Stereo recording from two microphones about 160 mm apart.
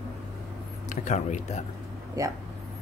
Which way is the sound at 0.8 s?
50° left (ahead or behind).